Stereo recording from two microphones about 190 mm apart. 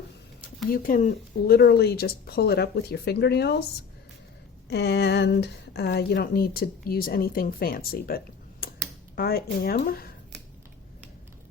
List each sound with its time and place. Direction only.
0.7 s speech: 45° left (ahead or behind)
4.7 s a woman's voice: 60° left (ahead or behind)